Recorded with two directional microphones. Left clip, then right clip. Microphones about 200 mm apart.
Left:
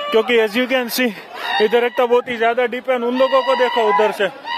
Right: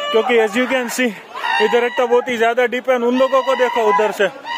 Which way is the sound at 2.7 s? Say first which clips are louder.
Right 3 dB; 35° right (ahead or behind).